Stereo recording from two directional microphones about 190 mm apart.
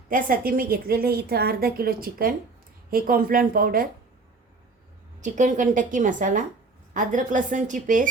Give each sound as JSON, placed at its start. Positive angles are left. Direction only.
{"t": 0.1, "sound": "a woman's voice", "side_deg": -45}
{"t": 5.2, "sound": "a woman's voice", "side_deg": -40}